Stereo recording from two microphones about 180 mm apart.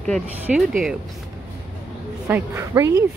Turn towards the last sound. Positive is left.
turn(degrees=-15)  # may be behind; listen again after turning